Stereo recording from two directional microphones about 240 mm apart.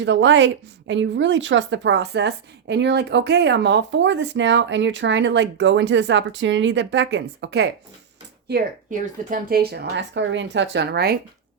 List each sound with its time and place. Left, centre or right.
0.0 s a woman's voice: right